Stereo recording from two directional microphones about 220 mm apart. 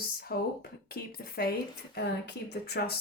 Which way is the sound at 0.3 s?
45° left (ahead or behind).